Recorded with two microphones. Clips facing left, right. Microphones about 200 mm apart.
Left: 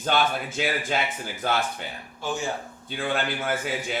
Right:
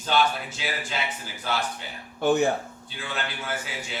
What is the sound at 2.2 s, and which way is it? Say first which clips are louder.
Speech: right 9 dB; 60° right (ahead or behind).